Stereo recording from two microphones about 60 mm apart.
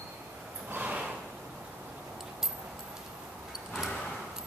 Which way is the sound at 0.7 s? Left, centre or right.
Right.